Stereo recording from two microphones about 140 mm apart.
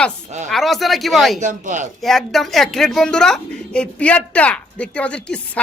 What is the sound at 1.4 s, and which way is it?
Speech, 60° right (ahead or behind).